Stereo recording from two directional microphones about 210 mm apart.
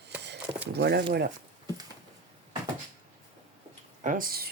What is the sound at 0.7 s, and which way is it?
Speech, 50° right (ahead or behind).